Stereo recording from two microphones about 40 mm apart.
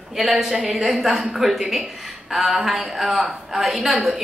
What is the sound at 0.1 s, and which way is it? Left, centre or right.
A woman's voice, centre.